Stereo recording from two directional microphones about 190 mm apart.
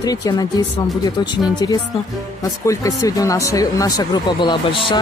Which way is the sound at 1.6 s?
20° left (ahead or behind).